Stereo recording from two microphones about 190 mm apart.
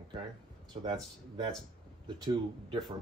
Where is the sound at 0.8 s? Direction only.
25° right (ahead or behind).